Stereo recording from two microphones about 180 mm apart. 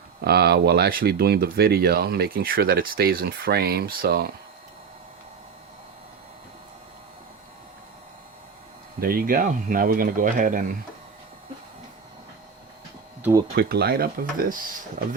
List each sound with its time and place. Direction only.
0.3 s speech: 60° right (ahead or behind)
9.0 s speech: 55° right (ahead or behind)
13.6 s speech: 60° right (ahead or behind)